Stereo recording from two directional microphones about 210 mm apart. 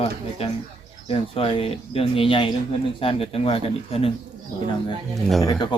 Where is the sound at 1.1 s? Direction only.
25° left (ahead or behind).